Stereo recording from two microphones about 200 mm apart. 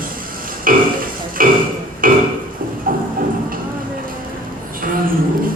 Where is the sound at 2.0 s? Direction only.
45° right (ahead or behind).